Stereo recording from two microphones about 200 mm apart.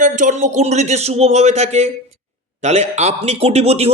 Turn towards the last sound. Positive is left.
turn(degrees=-30)  # may be behind; listen again after turning